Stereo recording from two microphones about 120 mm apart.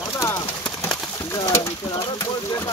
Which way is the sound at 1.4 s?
25° left (ahead or behind).